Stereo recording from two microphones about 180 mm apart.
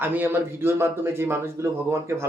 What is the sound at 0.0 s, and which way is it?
Speech, 10° right (ahead or behind).